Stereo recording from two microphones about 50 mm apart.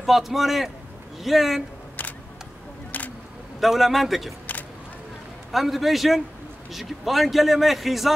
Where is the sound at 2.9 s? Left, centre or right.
Left.